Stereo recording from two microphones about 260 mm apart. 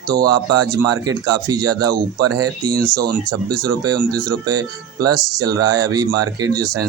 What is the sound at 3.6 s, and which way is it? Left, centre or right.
Speech, right.